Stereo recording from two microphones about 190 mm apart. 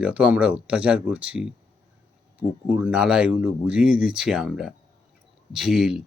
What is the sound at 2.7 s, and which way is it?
Speech, 5° right (ahead or behind).